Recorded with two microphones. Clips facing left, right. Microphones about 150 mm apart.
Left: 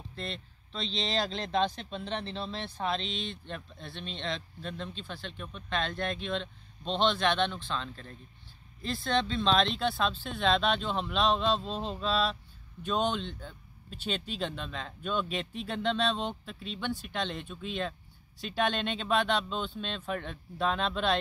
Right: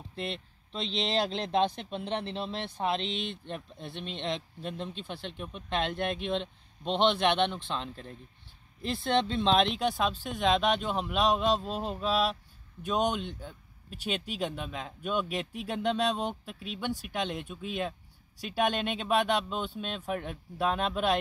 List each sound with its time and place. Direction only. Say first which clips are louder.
1.1 s speech: right 2 dB; 20° right (ahead or behind)
3.0 s speech: right 3 dB; 60° right (ahead or behind)
3.4 s speech: right 2 dB; 15° right (ahead or behind)